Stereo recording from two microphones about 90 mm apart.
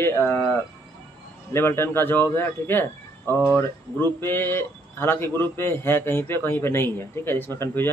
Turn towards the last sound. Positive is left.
turn(degrees=25)  # may be behind; listen again after turning